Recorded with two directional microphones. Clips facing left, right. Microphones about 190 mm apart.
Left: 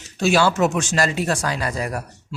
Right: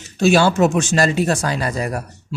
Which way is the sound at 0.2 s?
25° right (ahead or behind).